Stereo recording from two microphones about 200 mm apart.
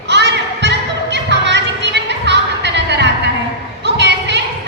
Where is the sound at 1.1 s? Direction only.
60° right (ahead or behind).